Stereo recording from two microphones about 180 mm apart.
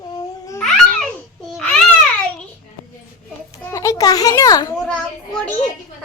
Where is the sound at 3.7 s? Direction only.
15° left (ahead or behind).